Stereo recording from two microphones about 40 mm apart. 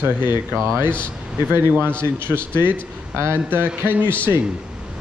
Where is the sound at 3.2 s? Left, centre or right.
Right.